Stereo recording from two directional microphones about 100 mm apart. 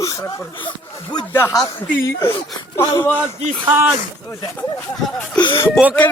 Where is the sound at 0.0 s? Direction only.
35° left (ahead or behind).